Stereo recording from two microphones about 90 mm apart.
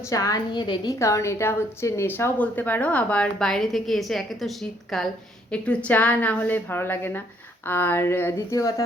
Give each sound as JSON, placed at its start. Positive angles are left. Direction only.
{"t": 0.1, "sound": "a woman's voice", "side_deg": 40}
{"t": 0.9, "sound": "a woman's voice", "side_deg": 35}
{"t": 5.5, "sound": "a woman's voice", "side_deg": 15}